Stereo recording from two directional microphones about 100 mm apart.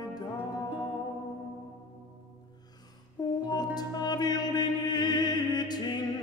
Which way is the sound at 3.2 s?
40° left (ahead or behind).